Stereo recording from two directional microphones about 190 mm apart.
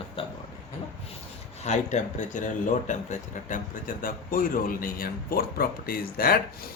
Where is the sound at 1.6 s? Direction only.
40° left (ahead or behind).